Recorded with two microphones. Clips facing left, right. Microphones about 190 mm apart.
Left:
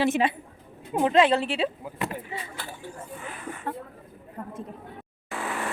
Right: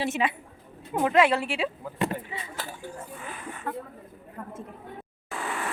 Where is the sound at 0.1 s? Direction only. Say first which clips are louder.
Left 3 dB; 35° left (ahead or behind).